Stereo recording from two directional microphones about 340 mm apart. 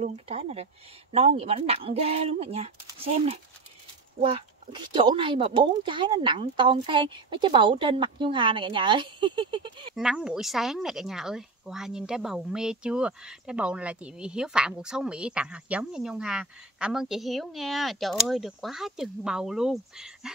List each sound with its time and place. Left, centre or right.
0.0 s speech: centre
9.9 s a woman's voice: centre